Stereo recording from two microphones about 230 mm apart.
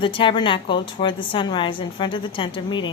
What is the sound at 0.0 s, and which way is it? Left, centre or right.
A woman's voice, left.